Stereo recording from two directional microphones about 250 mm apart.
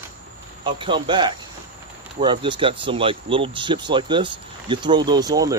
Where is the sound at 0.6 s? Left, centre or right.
Centre.